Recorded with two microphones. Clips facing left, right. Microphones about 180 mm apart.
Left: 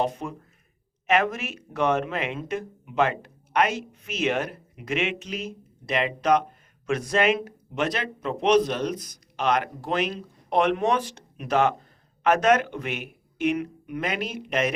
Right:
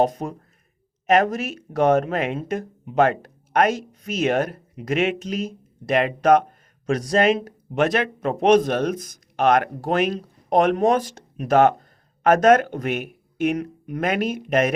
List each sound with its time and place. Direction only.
0.0 s a man's voice: 40° right (ahead or behind)
6.8 s speech: 35° right (ahead or behind)
7.8 s a man's voice: 55° right (ahead or behind)